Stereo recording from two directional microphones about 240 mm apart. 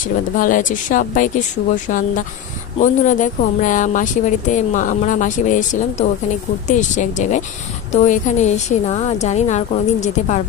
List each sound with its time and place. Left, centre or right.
0.0 s a woman's voice: left